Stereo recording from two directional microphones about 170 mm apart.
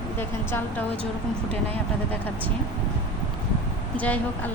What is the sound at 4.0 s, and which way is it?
Speech, 10° left (ahead or behind).